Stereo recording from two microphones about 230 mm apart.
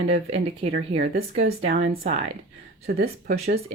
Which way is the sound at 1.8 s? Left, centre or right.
Right.